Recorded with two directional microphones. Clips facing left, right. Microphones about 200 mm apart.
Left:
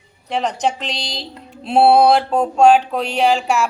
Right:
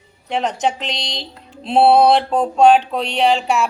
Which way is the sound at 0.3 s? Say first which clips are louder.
Even; centre (ahead or behind).